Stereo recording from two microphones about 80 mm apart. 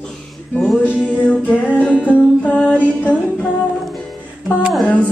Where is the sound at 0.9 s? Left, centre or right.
Centre.